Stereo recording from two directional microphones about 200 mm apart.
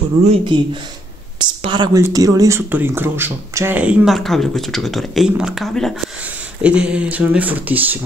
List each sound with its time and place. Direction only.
0.2 s speech: 30° right (ahead or behind); by 8.0 s 10° right (ahead or behind)